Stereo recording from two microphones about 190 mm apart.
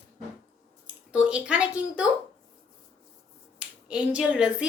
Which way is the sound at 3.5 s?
5° right (ahead or behind).